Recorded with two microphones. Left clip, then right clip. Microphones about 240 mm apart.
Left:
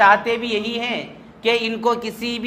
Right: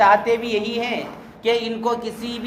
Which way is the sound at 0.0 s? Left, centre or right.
Left.